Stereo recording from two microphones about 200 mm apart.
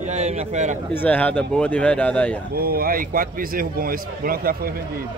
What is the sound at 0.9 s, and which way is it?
Speech, 10° left (ahead or behind).